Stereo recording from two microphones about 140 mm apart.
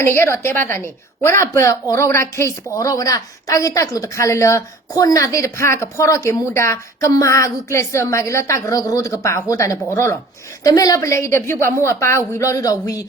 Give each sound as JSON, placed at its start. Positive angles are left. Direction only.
{"t": 0.0, "sound": "a woman's voice", "side_deg": 20}